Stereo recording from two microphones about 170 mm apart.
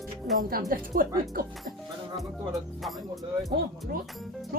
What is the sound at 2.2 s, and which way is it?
Speech, centre (ahead or behind).